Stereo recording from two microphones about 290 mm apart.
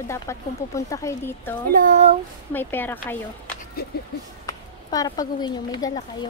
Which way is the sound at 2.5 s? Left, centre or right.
Centre.